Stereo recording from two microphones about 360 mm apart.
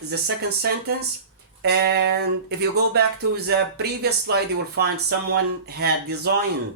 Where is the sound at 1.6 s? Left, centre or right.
Right.